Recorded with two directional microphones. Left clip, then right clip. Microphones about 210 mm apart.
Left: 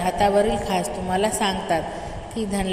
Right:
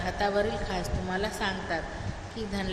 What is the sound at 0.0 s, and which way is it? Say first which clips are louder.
A woman's voice: left 9 dB; 30° left (ahead or behind).